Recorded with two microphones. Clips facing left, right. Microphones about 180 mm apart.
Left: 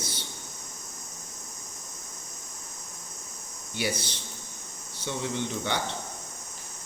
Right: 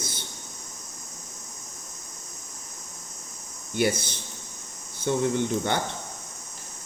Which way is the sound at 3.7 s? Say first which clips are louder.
Right 6 dB; 50° right (ahead or behind).